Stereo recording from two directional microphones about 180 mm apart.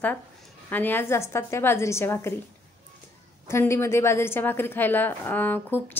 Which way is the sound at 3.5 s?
15° left (ahead or behind).